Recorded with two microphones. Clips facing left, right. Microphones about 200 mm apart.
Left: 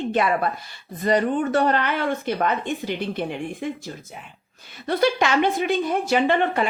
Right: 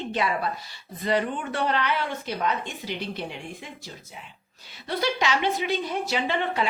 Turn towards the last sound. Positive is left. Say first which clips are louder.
# left 6 dB
turn(degrees=50)  # may be behind; listen again after turning